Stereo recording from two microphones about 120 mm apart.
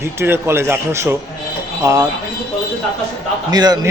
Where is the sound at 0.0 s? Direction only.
20° right (ahead or behind).